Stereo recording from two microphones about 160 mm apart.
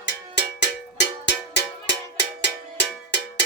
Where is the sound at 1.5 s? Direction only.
90° left.